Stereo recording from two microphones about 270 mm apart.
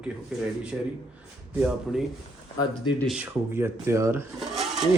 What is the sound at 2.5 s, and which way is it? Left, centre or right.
Speech, centre.